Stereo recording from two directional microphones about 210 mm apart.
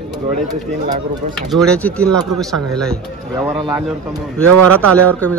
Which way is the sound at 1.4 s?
Centre (ahead or behind).